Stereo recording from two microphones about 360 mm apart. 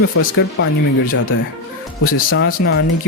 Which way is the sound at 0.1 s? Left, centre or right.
Left.